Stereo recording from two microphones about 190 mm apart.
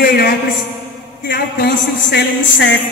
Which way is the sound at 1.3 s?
60° left (ahead or behind).